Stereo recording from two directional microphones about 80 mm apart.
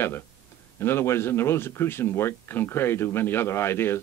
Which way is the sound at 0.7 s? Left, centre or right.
Left.